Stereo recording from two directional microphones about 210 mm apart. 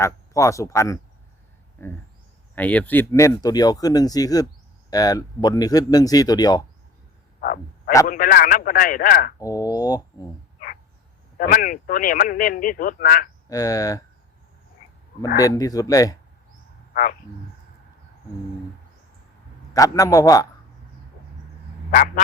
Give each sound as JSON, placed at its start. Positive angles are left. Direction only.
{"t": 0.0, "sound": "speech", "side_deg": 15}
{"t": 2.6, "sound": "speech", "side_deg": 5}
{"t": 7.4, "sound": "speech", "side_deg": 45}
{"t": 9.4, "sound": "speech", "side_deg": 15}
{"t": 11.3, "sound": "speech", "side_deg": 40}
{"t": 13.5, "sound": "speech", "side_deg": 15}
{"t": 15.4, "sound": "speech", "side_deg": 15}
{"t": 16.9, "sound": "speech", "side_deg": 40}
{"t": 19.7, "sound": "speech", "side_deg": 15}
{"t": 21.8, "sound": "speech", "side_deg": 45}